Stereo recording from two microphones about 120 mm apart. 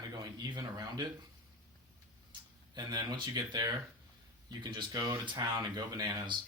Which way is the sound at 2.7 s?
35° right (ahead or behind).